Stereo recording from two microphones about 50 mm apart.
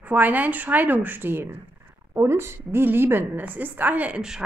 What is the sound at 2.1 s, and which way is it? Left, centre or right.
Speech, right.